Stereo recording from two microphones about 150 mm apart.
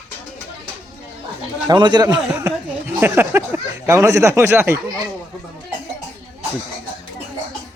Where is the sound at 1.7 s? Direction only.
30° right (ahead or behind).